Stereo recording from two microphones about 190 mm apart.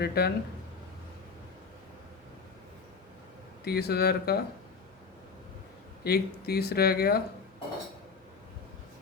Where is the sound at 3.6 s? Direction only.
55° left (ahead or behind).